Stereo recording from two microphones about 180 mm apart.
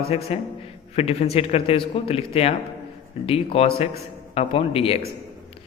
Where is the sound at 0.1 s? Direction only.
35° left (ahead or behind).